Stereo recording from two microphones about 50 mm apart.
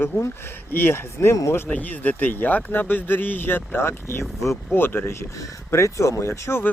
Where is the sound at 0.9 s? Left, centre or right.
Left.